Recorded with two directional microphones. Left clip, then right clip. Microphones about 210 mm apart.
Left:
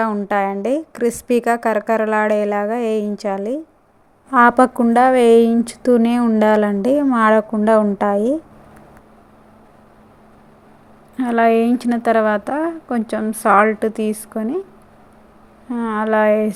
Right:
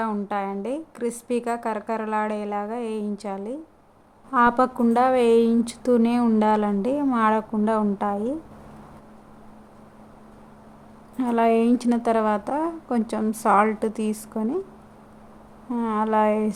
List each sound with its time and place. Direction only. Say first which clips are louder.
0.0 s a woman's voice: left 8 dB; 20° left (ahead or behind)
11.2 s a woman's voice: left 6 dB; 10° left (ahead or behind)
15.7 s a woman's voice: left 5 dB; 10° left (ahead or behind)